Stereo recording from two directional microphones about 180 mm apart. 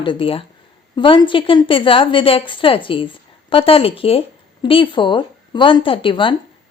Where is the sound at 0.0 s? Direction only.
30° left (ahead or behind).